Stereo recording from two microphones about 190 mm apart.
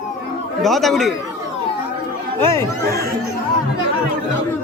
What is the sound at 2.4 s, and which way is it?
Speech, 15° left (ahead or behind).